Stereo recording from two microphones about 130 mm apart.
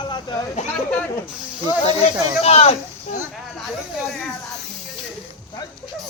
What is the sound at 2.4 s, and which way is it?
Speech, 50° left (ahead or behind).